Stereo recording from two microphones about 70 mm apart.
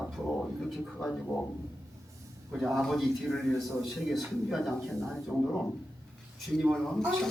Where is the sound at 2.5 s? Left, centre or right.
Centre.